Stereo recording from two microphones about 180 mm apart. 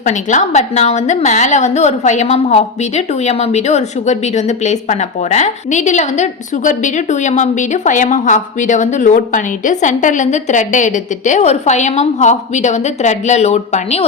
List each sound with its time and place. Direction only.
0.0 s a woman's voice: 45° left (ahead or behind)